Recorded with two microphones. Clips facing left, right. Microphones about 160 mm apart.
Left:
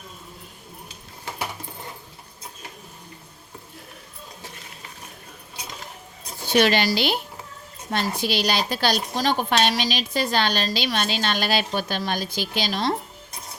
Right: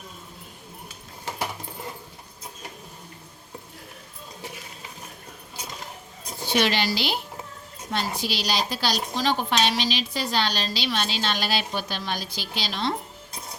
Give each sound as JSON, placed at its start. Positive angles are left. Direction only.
{"t": 6.5, "sound": "a woman's voice", "side_deg": 50}